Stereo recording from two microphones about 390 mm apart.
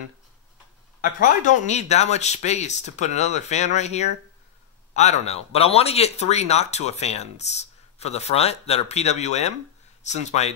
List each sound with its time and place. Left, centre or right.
1.2 s speech: centre